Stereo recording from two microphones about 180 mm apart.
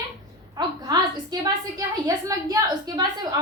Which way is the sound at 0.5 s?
20° right (ahead or behind).